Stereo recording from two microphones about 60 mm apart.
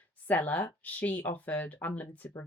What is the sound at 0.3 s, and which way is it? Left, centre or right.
Speech, left.